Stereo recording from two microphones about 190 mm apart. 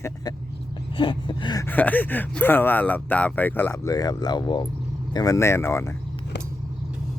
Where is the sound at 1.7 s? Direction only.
10° left (ahead or behind).